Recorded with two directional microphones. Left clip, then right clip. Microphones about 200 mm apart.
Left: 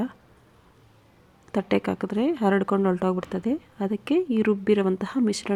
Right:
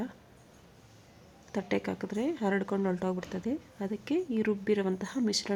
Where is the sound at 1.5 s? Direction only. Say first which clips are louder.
Left 8 dB; 15° left (ahead or behind).